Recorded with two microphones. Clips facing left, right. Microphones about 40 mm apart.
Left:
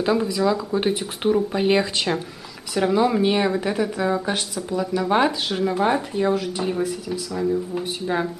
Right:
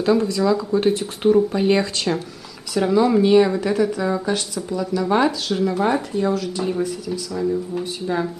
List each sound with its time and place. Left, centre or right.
0.0 s speech: centre
7.8 s speech: centre